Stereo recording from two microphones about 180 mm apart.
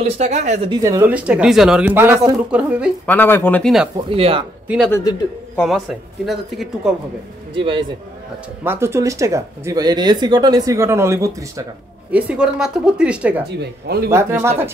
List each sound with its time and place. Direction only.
0.0 s speech: 40° right (ahead or behind)
0.7 s speech: 20° right (ahead or behind)
3.1 s speech: 10° left (ahead or behind)
4.1 s speech: 30° right (ahead or behind)
4.6 s speech: centre (ahead or behind)
7.5 s a man's voice: 30° right (ahead or behind)
8.6 s speech: 15° right (ahead or behind)
13.6 s speech: 60° right (ahead or behind)
14.1 s speech: 15° right (ahead or behind)